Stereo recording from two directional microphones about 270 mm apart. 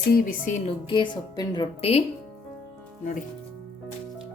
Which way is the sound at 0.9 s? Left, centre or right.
Centre.